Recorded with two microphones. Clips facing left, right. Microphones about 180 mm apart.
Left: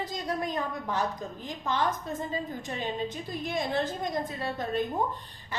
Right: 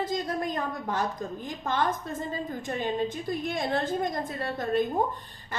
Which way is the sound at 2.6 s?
50° right (ahead or behind).